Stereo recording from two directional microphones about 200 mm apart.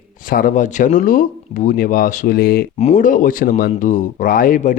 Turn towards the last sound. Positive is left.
turn(degrees=40)  # may be behind; listen again after turning